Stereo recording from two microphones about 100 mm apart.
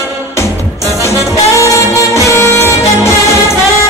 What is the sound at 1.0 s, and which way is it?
Music, 30° left (ahead or behind).